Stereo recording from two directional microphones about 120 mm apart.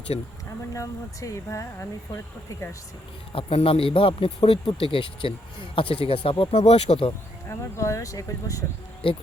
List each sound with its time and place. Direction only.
0.1 s speech: 55° left (ahead or behind)
0.7 s speech: 25° left (ahead or behind)
3.3 s speech: 50° left (ahead or behind)
6.6 s speech: 60° left (ahead or behind)
7.8 s speech: 25° left (ahead or behind)
9.0 s speech: 50° left (ahead or behind)